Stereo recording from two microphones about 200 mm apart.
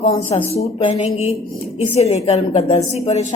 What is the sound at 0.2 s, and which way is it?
A woman's voice, 30° left (ahead or behind).